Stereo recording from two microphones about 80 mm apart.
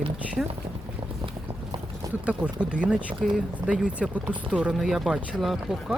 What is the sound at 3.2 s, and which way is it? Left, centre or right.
Speech, centre.